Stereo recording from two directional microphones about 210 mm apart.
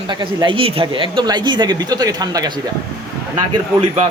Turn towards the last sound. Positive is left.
turn(degrees=-25)  # may be behind; listen again after turning